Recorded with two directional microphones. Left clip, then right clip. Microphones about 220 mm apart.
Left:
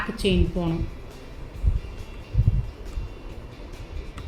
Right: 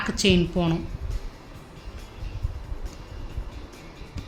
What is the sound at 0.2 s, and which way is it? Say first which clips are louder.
Speech: right 4 dB; 35° right (ahead or behind).